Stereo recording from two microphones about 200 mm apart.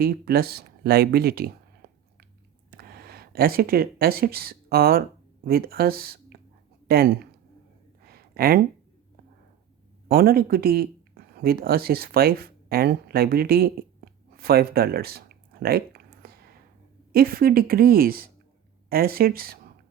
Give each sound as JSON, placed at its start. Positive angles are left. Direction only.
{"t": 0.0, "sound": "speech", "side_deg": -50}
{"t": 8.0, "sound": "a sound", "side_deg": -50}
{"t": 10.1, "sound": "a woman's voice", "side_deg": -50}